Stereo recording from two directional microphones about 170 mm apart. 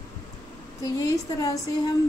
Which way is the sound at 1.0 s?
20° left (ahead or behind).